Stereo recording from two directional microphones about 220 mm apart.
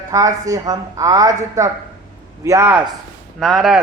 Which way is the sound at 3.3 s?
Centre (ahead or behind).